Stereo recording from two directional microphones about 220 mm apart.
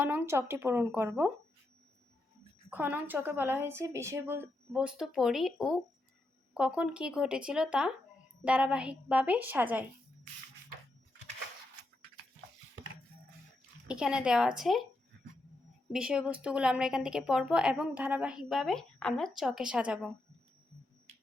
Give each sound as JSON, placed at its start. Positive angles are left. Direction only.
{"t": 0.0, "sound": "a woman's voice", "side_deg": -10}
{"t": 2.6, "sound": "a woman's voice", "side_deg": -10}
{"t": 13.8, "sound": "a woman's voice", "side_deg": -5}
{"t": 15.9, "sound": "a woman's voice", "side_deg": -5}